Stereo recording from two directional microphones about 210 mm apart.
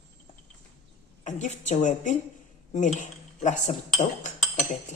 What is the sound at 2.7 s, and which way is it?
Cutlery, 35° left (ahead or behind).